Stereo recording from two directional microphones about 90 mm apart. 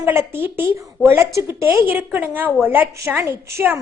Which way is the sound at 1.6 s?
25° right (ahead or behind).